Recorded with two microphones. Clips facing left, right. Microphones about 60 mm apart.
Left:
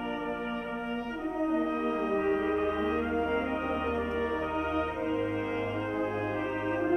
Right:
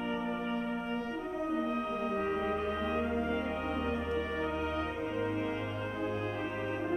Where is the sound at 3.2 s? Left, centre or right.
Left.